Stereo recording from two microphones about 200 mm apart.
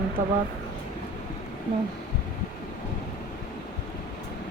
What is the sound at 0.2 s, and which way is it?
Speech, 40° right (ahead or behind).